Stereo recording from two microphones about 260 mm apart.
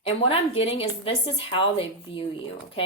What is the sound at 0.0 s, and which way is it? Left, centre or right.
A woman's voice, left.